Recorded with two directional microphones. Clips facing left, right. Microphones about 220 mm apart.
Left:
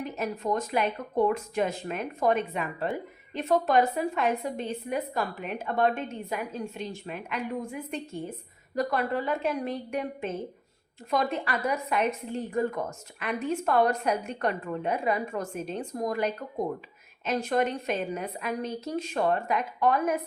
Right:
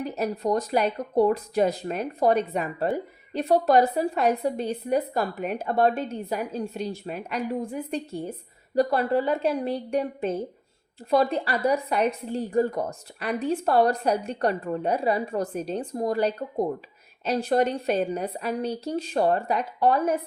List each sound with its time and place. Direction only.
0.0 s speech: 35° right (ahead or behind)